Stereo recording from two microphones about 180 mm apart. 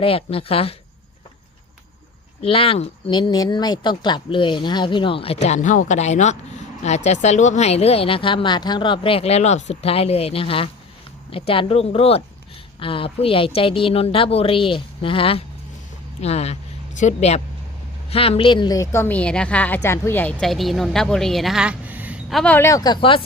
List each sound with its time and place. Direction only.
0.0 s a woman's voice: 30° left (ahead or behind)
2.4 s a woman's voice: 30° left (ahead or behind); by 22.5 s centre (ahead or behind)
22.5 s speech: 15° left (ahead or behind)